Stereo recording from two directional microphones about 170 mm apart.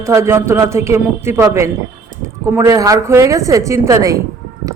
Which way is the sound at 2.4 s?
15° right (ahead or behind).